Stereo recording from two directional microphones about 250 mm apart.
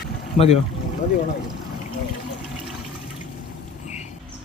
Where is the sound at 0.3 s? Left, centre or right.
Left.